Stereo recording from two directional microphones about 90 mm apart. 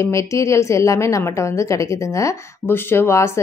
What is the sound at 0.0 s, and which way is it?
A woman's voice, 35° left (ahead or behind).